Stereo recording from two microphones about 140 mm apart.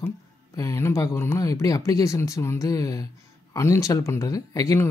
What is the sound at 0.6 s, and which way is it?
Speech, 20° left (ahead or behind).